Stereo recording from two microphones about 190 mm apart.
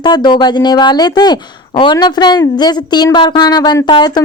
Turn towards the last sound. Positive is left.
turn(degrees=20)  # may be behind; listen again after turning